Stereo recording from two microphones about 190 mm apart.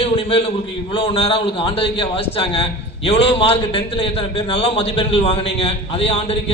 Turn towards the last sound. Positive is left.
turn(degrees=30)  # may be behind; listen again after turning